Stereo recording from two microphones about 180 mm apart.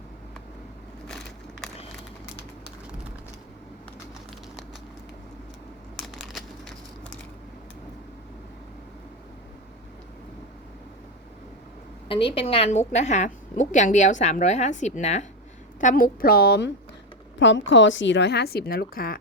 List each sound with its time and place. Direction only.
6.0 s crumpling: centre (ahead or behind)
12.0 s a woman's voice: 30° left (ahead or behind); by 16.7 s 65° left (ahead or behind)
17.7 s a woman's voice: 90° left; by 19.2 s 55° left (ahead or behind)